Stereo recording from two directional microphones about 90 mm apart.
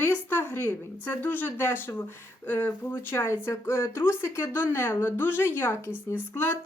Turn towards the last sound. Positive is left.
turn(degrees=25)  # may be behind; listen again after turning